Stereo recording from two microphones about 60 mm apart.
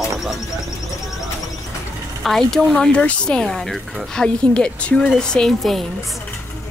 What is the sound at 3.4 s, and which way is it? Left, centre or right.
Speech, centre.